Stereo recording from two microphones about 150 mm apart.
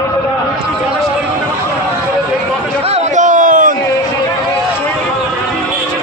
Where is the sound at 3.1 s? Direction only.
60° right (ahead or behind).